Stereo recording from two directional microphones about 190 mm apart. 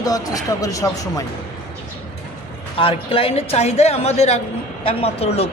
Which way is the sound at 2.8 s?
30° left (ahead or behind).